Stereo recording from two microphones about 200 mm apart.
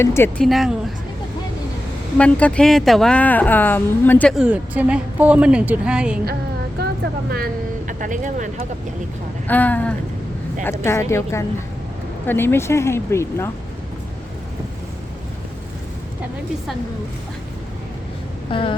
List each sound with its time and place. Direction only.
0.0 s a woman's voice: 10° left (ahead or behind)
0.4 s speech: centre (ahead or behind)
2.1 s a woman's voice: 5° left (ahead or behind)
4.4 s speech: 5° right (ahead or behind)
7.3 s speech: 50° right (ahead or behind)
9.5 s a woman's voice: 10° left (ahead or behind)
18.5 s a sound: 25° left (ahead or behind)